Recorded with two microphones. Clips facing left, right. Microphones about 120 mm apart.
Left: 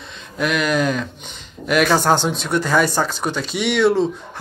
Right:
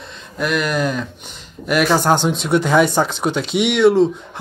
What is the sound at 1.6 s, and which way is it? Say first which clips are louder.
Speech: even; 5° right (ahead or behind).